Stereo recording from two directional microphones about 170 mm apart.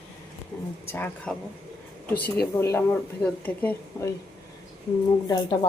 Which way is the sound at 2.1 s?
65° left (ahead or behind).